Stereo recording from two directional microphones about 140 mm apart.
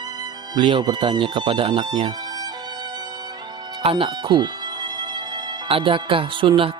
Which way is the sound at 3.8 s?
40° right (ahead or behind).